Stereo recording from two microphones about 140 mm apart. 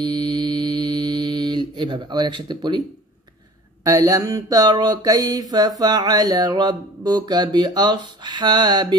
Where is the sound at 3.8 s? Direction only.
25° right (ahead or behind).